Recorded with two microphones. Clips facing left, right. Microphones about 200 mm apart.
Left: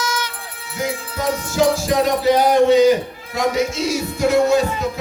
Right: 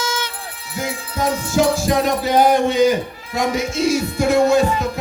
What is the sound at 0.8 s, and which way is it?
Music, 50° right (ahead or behind).